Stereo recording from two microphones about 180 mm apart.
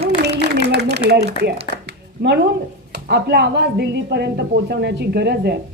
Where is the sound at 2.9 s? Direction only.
70° right (ahead or behind).